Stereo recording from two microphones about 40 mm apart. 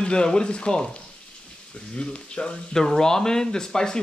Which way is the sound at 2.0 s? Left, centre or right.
Left.